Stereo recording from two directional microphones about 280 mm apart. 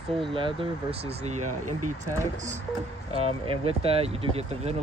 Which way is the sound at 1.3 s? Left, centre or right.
Right.